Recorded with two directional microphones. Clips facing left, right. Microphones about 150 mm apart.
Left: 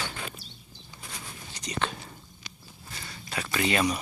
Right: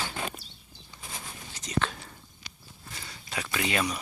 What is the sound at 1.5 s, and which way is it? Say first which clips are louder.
Whispering: right 2 dB; 5° right (ahead or behind).